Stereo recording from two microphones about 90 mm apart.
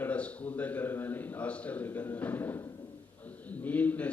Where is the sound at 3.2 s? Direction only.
15° left (ahead or behind).